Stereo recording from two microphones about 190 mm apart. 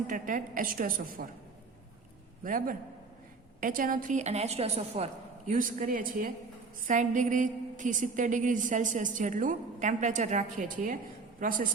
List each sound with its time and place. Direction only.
0.1 s a woman's voice: 45° right (ahead or behind)
2.4 s a woman's voice: 45° right (ahead or behind)
5.5 s a woman's voice: 45° right (ahead or behind)